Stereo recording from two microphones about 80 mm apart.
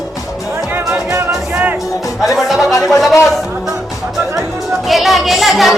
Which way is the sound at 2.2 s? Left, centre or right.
Centre.